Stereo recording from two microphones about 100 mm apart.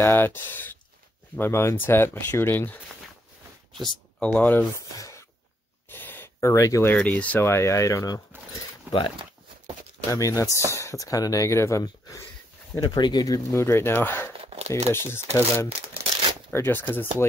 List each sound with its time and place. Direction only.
0.0 s speech: 20° left (ahead or behind)
3.8 s speech: 10° left (ahead or behind)
4.9 s a sound: 35° left (ahead or behind)
5.9 s gasp: 20° left (ahead or behind)
6.9 s speech: 15° left (ahead or behind); by 8.2 s 35° left (ahead or behind)
8.9 s a sound: 20° right (ahead or behind)
10.1 s speech: 35° left (ahead or behind)
12.7 s speech: 40° left (ahead or behind); by 14.3 s 25° left (ahead or behind)
14.4 s a sound: 90° right
15.3 s speech: 30° left (ahead or behind)
15.9 s a sound: 65° right (ahead or behind)
16.5 s speech: 20° left (ahead or behind)